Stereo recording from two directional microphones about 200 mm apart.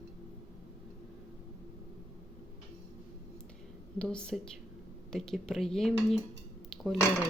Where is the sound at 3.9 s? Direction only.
5° left (ahead or behind).